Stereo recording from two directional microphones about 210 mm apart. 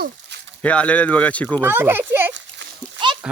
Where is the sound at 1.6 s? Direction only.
10° right (ahead or behind).